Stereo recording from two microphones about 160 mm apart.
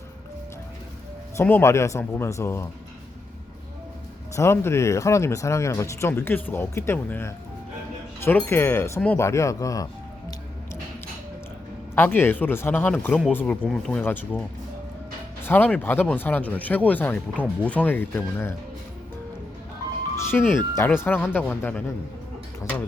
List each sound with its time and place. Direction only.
1.4 s speech: 15° left (ahead or behind)
4.4 s speech: 15° left (ahead or behind)
8.4 s speech: 15° left (ahead or behind)
11.9 s speech: 15° left (ahead or behind)
15.4 s speech: 10° left (ahead or behind)
20.1 s speech: 15° left (ahead or behind)